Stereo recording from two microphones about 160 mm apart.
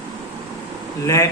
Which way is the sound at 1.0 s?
20° left (ahead or behind).